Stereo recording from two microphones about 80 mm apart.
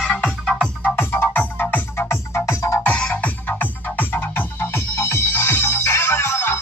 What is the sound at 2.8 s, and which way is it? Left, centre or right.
Music, centre.